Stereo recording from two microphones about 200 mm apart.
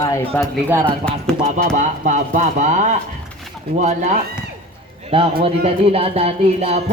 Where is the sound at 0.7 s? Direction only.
10° right (ahead or behind).